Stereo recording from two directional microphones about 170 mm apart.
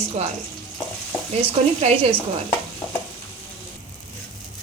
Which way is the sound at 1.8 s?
35° right (ahead or behind).